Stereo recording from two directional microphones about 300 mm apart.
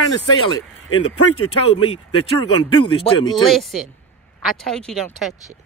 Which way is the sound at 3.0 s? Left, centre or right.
Centre.